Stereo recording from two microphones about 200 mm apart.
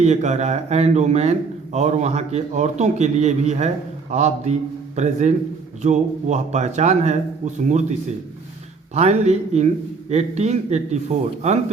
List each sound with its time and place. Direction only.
0.0 s a man's voice: 35° right (ahead or behind)
9.0 s a man's voice: 35° right (ahead or behind)